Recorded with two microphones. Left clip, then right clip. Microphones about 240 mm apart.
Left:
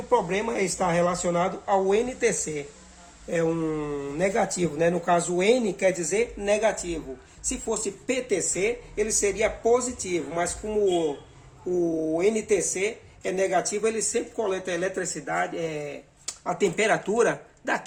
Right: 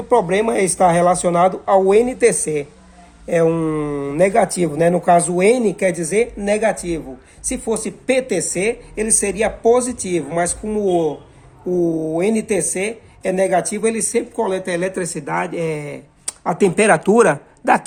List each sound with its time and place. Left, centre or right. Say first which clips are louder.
0.1 s speech: right 9 dB; right
11.7 s speech: right 6 dB; right